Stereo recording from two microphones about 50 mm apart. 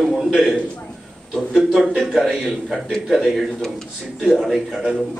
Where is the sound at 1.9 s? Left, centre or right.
Centre.